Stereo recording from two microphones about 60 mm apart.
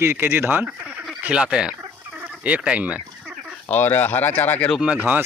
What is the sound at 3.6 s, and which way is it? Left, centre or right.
Speech, left.